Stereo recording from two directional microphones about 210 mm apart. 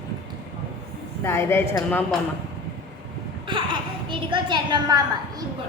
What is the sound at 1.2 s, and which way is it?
Speech, 10° left (ahead or behind).